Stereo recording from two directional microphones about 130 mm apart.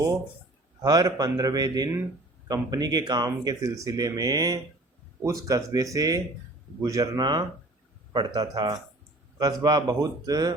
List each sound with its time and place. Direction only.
0.8 s speech: 30° right (ahead or behind)